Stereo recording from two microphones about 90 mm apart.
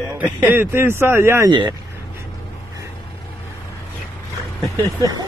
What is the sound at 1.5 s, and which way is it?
Speech, 60° right (ahead or behind).